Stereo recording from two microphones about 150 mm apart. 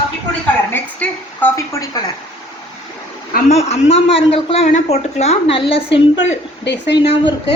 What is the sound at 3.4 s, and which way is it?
A man's voice, 45° left (ahead or behind).